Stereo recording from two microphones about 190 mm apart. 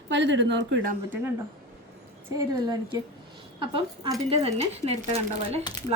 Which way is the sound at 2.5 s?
20° right (ahead or behind).